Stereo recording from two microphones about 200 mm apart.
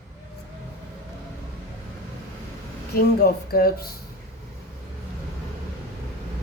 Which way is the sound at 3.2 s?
50° left (ahead or behind).